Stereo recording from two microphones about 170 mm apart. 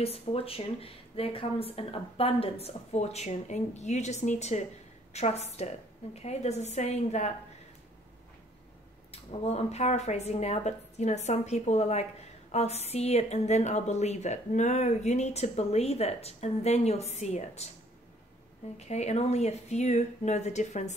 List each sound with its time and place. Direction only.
0.0 s a woman's voice: 35° left (ahead or behind)
9.1 s a woman's voice: 35° left (ahead or behind)
18.8 s a woman's voice: 40° left (ahead or behind)